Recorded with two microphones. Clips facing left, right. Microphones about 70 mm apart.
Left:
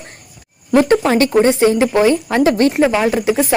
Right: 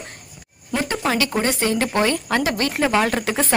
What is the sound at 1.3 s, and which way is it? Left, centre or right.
Speech, left.